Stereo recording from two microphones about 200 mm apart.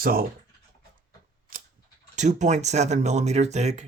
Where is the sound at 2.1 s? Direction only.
35° right (ahead or behind).